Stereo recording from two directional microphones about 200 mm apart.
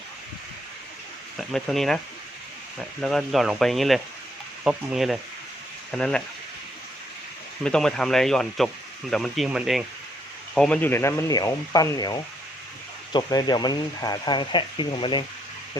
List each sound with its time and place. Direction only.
1.4 s speech: centre (ahead or behind)
3.0 s speech: centre (ahead or behind)
7.6 s speech: 5° left (ahead or behind); by 15.2 s 25° left (ahead or behind)